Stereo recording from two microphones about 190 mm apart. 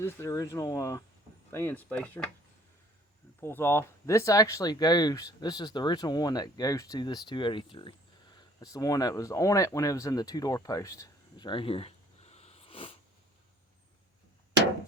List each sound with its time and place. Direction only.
0.0 s speech: 15° left (ahead or behind)
3.4 s speech: 10° left (ahead or behind); by 13.0 s 30° left (ahead or behind)